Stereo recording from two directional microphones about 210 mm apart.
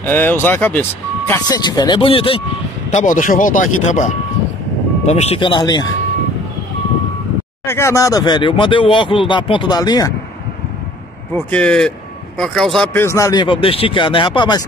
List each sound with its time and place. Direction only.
0.0 s speech: 10° left (ahead or behind); by 2.4 s 25° left (ahead or behind)
2.9 s speech: 35° left (ahead or behind); by 5.9 s 20° left (ahead or behind)
7.6 s speech: 10° left (ahead or behind)
11.3 s speech: 5° left (ahead or behind); by 14.6 s 20° left (ahead or behind)